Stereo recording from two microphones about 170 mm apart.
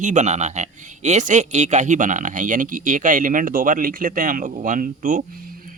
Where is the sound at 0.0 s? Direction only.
45° right (ahead or behind).